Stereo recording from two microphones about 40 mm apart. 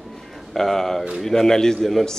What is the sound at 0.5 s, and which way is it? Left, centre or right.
Speech, centre.